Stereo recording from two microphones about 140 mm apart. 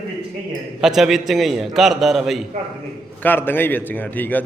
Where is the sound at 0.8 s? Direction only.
Centre (ahead or behind).